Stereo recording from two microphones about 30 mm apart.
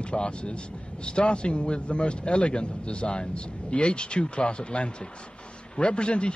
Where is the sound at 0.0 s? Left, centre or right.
Left.